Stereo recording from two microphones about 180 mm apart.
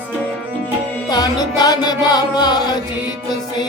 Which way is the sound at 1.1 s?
20° left (ahead or behind).